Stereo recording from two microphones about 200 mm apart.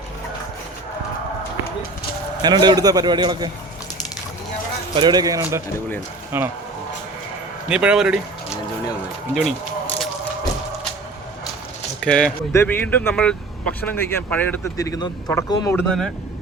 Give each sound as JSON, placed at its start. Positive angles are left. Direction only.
{"t": 2.4, "sound": "a man's voice", "side_deg": -20}
{"t": 4.9, "sound": "speech", "side_deg": -20}
{"t": 7.7, "sound": "speech", "side_deg": -5}
{"t": 11.9, "sound": "speech", "side_deg": 5}
{"t": 15.9, "sound": "speech", "side_deg": 0}